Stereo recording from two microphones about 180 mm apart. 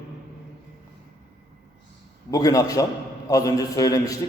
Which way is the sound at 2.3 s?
20° left (ahead or behind).